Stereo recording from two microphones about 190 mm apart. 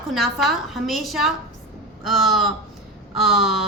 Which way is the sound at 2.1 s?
Centre (ahead or behind).